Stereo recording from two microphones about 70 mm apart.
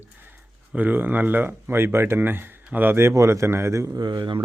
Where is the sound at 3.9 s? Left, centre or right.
Right.